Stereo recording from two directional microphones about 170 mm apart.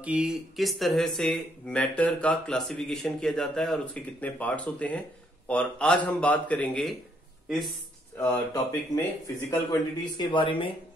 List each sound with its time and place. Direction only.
0.0 s a man's voice: 5° right (ahead or behind)
8.9 s speech: 20° left (ahead or behind)